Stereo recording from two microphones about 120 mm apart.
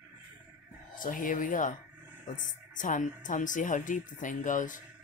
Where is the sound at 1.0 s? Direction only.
90° left.